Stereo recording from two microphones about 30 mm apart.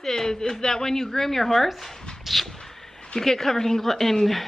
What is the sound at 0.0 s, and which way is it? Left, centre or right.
A woman's voice, centre.